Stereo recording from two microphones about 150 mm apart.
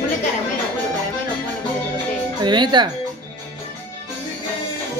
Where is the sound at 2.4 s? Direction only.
30° right (ahead or behind).